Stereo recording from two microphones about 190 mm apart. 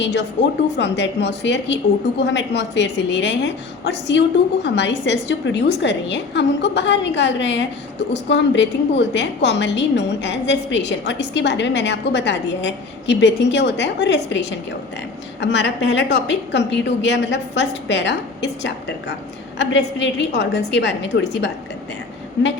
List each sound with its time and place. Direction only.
0.0 s a woman's voice: 70° left (ahead or behind)